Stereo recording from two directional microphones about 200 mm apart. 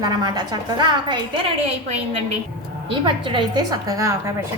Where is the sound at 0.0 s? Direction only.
20° right (ahead or behind).